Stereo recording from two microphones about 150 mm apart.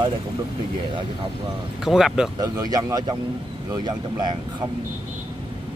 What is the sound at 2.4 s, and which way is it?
Speech, 25° right (ahead or behind).